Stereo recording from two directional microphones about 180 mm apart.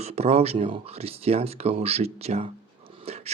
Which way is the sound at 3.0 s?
35° right (ahead or behind).